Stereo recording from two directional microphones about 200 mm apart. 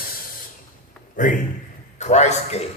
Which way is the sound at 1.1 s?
40° left (ahead or behind).